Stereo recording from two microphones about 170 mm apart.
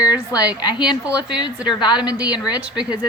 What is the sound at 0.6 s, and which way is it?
A woman's voice, 25° left (ahead or behind).